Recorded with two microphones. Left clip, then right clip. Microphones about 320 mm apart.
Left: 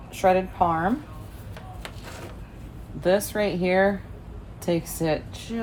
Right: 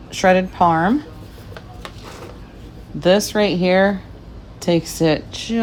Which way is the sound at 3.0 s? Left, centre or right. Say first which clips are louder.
Right 7 dB; right.